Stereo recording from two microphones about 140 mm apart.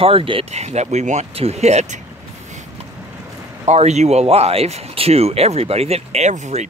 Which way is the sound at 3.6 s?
55° right (ahead or behind).